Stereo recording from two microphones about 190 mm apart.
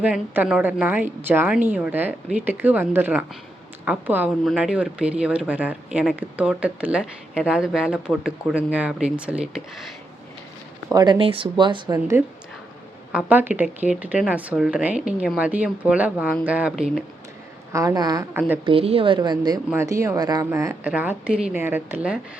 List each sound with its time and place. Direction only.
0.0 s a woman's voice: 5° right (ahead or behind)
10.8 s speech: 20° right (ahead or behind)
11.9 s a woman's voice: 10° right (ahead or behind)
17.7 s a woman's voice: 15° right (ahead or behind)
18.3 s a woman's voice: 10° right (ahead or behind)
18.6 s a woman's voice: 30° right (ahead or behind); by 22.2 s 10° right (ahead or behind)